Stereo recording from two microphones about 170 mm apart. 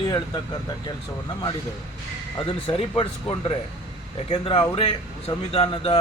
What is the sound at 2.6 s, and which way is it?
Speech, 35° left (ahead or behind).